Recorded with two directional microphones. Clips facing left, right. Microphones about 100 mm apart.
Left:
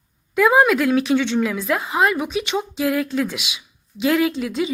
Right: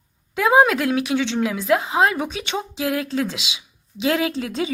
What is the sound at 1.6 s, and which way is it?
Speech, 25° right (ahead or behind).